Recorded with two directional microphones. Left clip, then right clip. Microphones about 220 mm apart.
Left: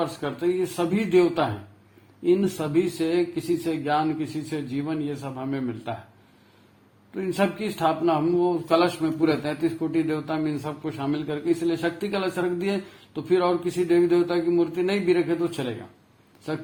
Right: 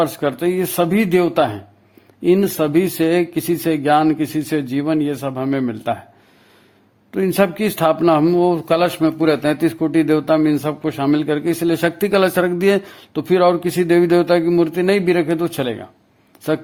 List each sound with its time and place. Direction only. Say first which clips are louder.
0.0 s a man's voice: right 8 dB; 50° right (ahead or behind)
7.1 s a man's voice: right 9 dB; 50° right (ahead or behind)